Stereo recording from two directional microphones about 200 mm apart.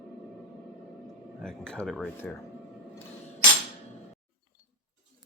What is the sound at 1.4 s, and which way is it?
Speech, 5° left (ahead or behind).